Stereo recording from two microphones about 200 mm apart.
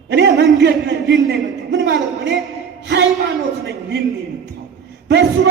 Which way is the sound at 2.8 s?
60° right (ahead or behind).